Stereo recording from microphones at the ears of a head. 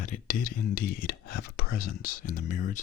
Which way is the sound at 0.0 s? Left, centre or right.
Left.